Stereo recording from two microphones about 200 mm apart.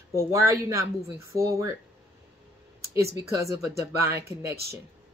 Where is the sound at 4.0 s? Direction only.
15° right (ahead or behind).